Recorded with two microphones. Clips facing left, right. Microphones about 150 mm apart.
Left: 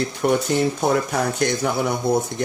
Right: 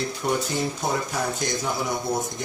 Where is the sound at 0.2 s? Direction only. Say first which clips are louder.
Left 7 dB; 65° left (ahead or behind).